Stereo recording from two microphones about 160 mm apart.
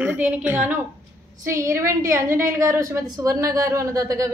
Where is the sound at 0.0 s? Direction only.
10° right (ahead or behind).